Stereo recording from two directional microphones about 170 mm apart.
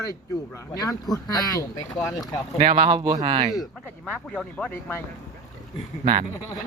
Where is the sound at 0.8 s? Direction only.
20° left (ahead or behind).